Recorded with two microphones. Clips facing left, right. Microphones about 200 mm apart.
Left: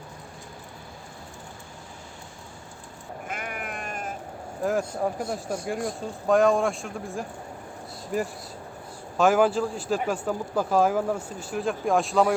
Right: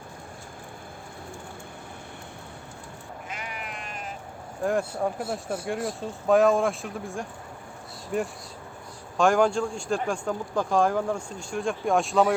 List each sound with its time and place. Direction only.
3.2 s sheep: 50° left (ahead or behind)
4.6 s speech: centre (ahead or behind)